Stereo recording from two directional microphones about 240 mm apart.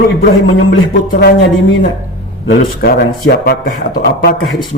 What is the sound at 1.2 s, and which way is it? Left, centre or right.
Mantra, left.